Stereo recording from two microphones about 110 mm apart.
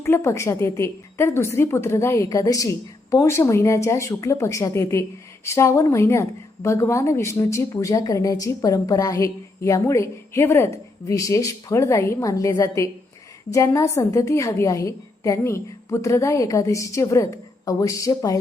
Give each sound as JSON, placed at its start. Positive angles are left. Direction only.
{"t": 0.0, "sound": "a woman's voice", "side_deg": 25}